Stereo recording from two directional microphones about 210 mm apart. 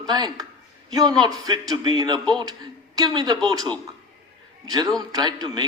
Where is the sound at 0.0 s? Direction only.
20° right (ahead or behind).